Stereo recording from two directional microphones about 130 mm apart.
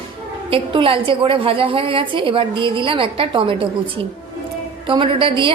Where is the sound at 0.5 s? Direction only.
40° right (ahead or behind).